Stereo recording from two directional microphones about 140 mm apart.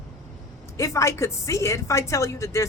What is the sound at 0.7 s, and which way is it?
Speech, 20° left (ahead or behind).